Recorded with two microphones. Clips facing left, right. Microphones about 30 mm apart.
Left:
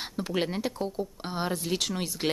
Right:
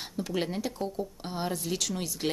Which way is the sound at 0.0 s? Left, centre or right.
Left.